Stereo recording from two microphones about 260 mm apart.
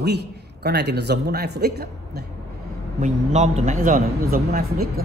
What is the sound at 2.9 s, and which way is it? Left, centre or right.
A man's voice, right.